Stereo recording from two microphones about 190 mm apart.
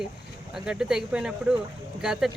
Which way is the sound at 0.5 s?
5° right (ahead or behind).